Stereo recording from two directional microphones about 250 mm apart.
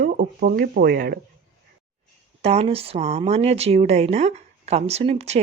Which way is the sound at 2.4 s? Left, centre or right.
Right.